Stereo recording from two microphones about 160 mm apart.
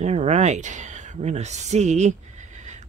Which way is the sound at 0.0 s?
45° right (ahead or behind).